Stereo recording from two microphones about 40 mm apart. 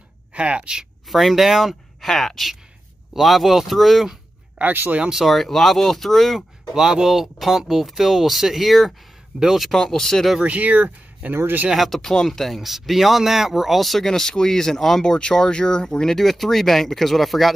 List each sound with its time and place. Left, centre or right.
0.3 s speech: right
1.0 s speech: centre
4.7 s speech: right
5.1 s speech: centre
6.7 s speech: centre
9.8 s speech: centre
10.4 s speech: right
11.7 s speech: centre
12.0 s speech: centre
14.0 s speech: centre
15.1 s speech: left
16.2 s speech: centre